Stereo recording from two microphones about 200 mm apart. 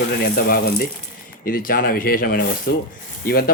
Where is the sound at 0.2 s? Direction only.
45° left (ahead or behind).